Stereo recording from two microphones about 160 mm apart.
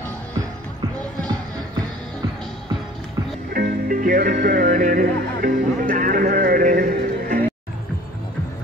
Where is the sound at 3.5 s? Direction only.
65° right (ahead or behind).